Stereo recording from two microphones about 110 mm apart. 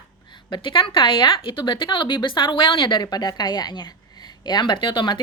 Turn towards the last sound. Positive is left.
turn(degrees=45)  # may be behind; listen again after turning